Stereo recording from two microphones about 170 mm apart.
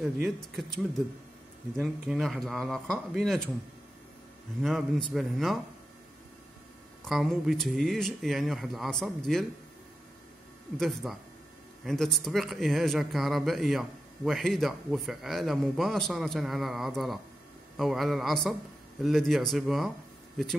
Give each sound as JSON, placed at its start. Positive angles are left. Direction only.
{"t": 0.0, "sound": "speech", "side_deg": 0}
{"t": 4.6, "sound": "speech", "side_deg": 0}
{"t": 7.1, "sound": "speech", "side_deg": 0}
{"t": 10.8, "sound": "speech", "side_deg": 0}